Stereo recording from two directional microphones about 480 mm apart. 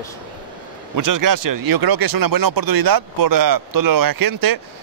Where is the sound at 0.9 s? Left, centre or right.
Right.